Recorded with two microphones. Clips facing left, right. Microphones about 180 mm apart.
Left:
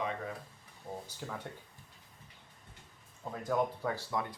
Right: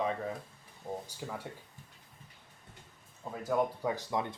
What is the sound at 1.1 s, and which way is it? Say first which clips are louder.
Speech: right 1 dB; 5° right (ahead or behind).